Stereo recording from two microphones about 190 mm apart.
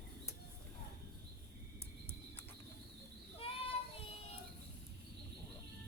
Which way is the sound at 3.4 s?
30° left (ahead or behind).